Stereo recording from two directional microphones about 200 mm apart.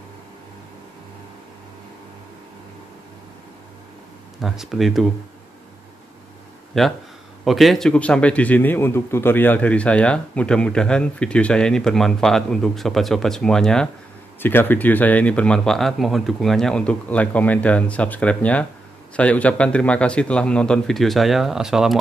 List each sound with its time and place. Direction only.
4.4 s a man's voice: centre (ahead or behind)
6.7 s a man's voice: centre (ahead or behind)